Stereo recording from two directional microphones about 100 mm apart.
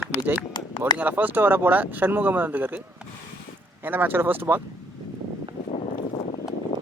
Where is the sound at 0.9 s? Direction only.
15° right (ahead or behind).